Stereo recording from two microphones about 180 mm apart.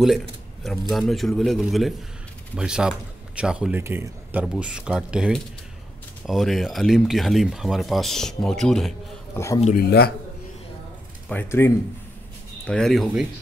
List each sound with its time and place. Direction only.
0.7 s speech: centre (ahead or behind)
9.3 s a man's voice: 15° left (ahead or behind)
9.8 s a man's voice: 60° left (ahead or behind)
11.2 s speech: 10° left (ahead or behind)